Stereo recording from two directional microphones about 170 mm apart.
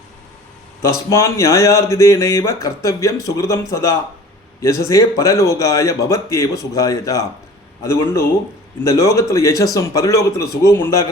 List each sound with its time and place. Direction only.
0.8 s speech: 15° left (ahead or behind)
8.8 s a man's voice: 15° left (ahead or behind)